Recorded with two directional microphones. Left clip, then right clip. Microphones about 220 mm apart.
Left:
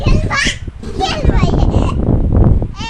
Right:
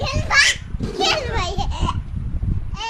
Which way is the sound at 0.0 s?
40° right (ahead or behind).